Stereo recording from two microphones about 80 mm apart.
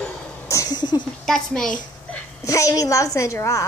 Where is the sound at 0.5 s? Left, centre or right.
Left.